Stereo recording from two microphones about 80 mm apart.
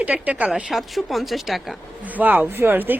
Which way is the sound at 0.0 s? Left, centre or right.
Centre.